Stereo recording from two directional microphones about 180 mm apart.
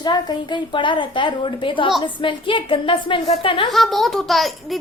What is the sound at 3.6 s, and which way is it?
A child's voice, centre (ahead or behind).